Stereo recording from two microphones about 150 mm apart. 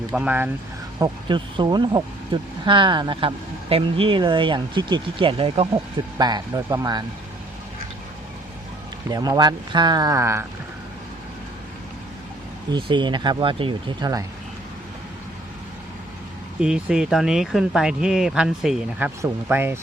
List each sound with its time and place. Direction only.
0.1 s speech: 10° right (ahead or behind)
0.9 s speech: 30° right (ahead or behind)
6.1 s speech: 25° right (ahead or behind)
9.0 s speech: 25° right (ahead or behind)
12.7 s speech: 30° right (ahead or behind)
16.6 s speech: 5° right (ahead or behind)